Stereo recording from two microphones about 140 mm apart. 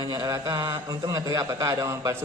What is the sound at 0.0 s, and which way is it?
A man's voice, 30° right (ahead or behind).